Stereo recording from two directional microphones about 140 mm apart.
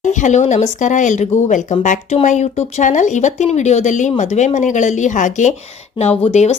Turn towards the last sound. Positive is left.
turn(degrees=55)  # may be behind; listen again after turning